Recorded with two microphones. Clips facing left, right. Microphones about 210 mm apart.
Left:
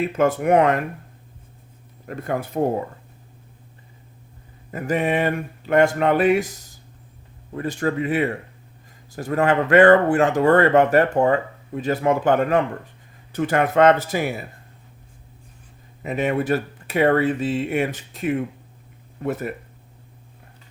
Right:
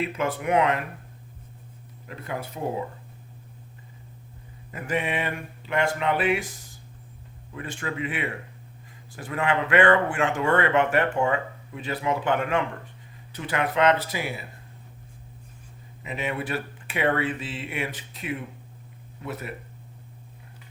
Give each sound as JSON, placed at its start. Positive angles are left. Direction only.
{"t": 0.0, "sound": "speech", "side_deg": 45}
{"t": 2.0, "sound": "speech", "side_deg": 50}
{"t": 4.7, "sound": "speech", "side_deg": 40}
{"t": 7.5, "sound": "speech", "side_deg": 40}
{"t": 16.0, "sound": "speech", "side_deg": 45}